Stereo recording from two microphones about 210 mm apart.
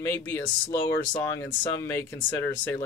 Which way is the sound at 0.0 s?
10° left (ahead or behind).